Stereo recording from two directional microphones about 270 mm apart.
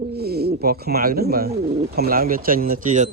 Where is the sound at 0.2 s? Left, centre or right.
Right.